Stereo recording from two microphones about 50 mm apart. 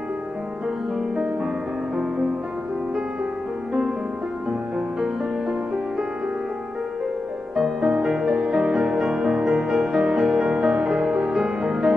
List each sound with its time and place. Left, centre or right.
4.5 s music: centre
7.5 s music: centre